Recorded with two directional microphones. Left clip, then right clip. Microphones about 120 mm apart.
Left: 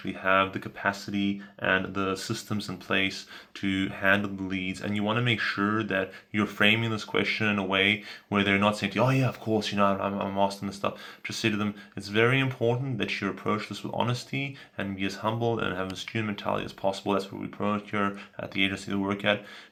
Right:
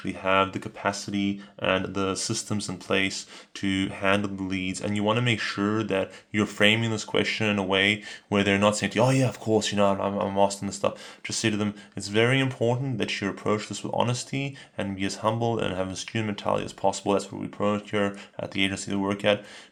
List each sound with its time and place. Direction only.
0.0 s speech: 40° right (ahead or behind)